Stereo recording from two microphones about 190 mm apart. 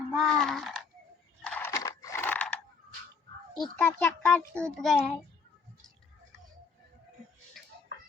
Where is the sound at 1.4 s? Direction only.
10° left (ahead or behind).